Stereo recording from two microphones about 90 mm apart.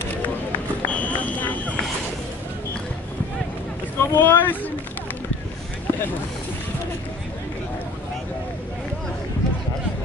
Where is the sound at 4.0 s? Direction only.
25° left (ahead or behind).